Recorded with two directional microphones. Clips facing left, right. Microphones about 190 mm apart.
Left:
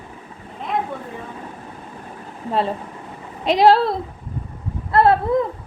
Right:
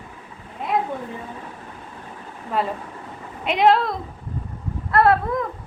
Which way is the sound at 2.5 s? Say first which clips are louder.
Left 3 dB; 30° left (ahead or behind).